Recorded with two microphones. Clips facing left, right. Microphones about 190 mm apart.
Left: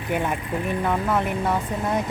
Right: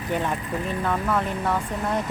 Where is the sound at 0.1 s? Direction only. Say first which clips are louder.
Left 1 dB; 10° left (ahead or behind).